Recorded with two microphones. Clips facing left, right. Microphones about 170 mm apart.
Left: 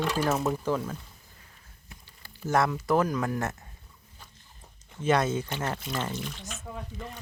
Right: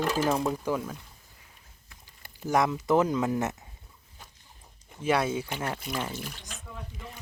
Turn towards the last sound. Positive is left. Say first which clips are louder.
# left 4 dB
turn(degrees=-10)  # may be behind; listen again after turning